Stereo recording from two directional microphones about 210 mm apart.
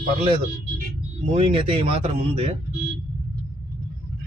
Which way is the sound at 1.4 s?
25° right (ahead or behind).